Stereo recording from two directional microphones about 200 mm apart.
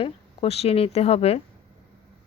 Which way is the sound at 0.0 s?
30° left (ahead or behind).